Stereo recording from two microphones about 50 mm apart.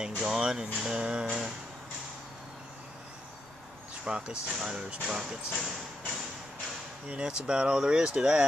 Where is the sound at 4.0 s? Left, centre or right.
Centre.